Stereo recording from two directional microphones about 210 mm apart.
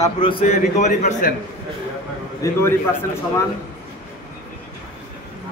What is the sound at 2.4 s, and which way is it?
Speech, 15° left (ahead or behind).